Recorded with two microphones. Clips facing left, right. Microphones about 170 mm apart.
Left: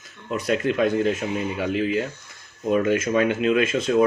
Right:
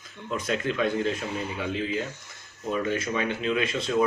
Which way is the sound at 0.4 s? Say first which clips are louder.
Left 6 dB; 45° left (ahead or behind).